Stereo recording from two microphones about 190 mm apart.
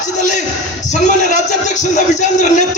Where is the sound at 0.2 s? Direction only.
40° left (ahead or behind).